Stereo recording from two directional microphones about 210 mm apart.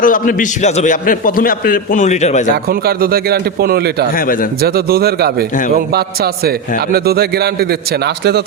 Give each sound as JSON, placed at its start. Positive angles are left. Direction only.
{"t": 0.0, "sound": "a man's voice", "side_deg": 40}
{"t": 2.6, "sound": "a man's voice", "side_deg": -45}